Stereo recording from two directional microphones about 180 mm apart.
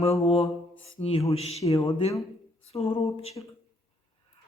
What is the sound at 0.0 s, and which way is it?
Mantra, 35° left (ahead or behind).